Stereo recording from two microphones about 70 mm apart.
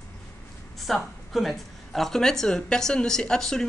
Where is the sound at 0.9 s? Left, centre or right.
Centre.